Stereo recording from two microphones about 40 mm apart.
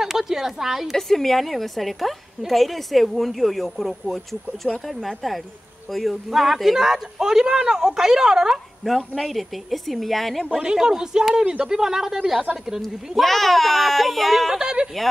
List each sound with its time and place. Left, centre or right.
0.0 s a sound: centre
0.9 s a woman's voice: centre
9.2 s a woman's voice: centre
10.6 s speech: centre
13.2 s a woman's voice: centre
14.5 s speech: centre